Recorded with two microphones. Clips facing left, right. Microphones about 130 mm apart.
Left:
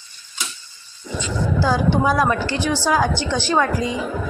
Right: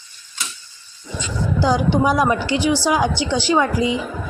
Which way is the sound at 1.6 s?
15° right (ahead or behind).